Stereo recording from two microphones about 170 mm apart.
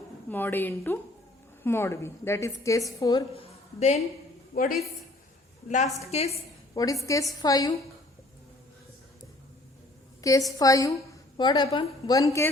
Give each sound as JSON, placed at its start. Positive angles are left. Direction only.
{"t": 0.3, "sound": "a woman's voice", "side_deg": 10}
{"t": 3.3, "sound": "a sound", "side_deg": 35}
{"t": 4.5, "sound": "a woman's voice", "side_deg": 55}
{"t": 6.7, "sound": "a woman's voice", "side_deg": 20}
{"t": 10.2, "sound": "a woman's voice", "side_deg": 20}
{"t": 12.1, "sound": "a woman's voice", "side_deg": 20}